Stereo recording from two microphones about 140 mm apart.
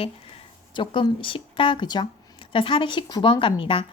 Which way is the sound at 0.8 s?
35° left (ahead or behind).